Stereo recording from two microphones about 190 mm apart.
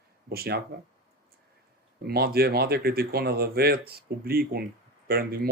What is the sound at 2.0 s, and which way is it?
Speech, 55° right (ahead or behind).